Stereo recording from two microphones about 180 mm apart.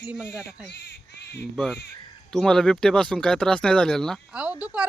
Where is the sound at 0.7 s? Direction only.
80° left.